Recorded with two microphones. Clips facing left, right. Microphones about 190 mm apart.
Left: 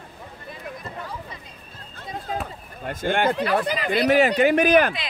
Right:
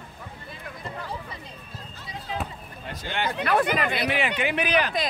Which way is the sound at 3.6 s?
55° right (ahead or behind).